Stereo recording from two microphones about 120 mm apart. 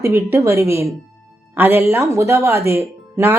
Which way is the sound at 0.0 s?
25° right (ahead or behind).